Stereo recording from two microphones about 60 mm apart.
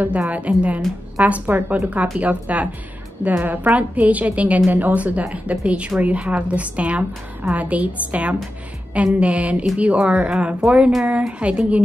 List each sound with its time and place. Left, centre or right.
0.0 s a woman's voice: right
10.3 s speech: centre
11.1 s a woman's voice: right